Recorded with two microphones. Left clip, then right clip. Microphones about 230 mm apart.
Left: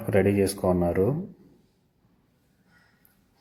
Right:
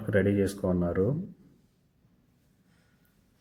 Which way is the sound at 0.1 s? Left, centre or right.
Left.